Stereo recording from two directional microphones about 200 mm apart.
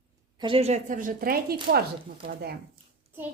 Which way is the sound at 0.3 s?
25° right (ahead or behind).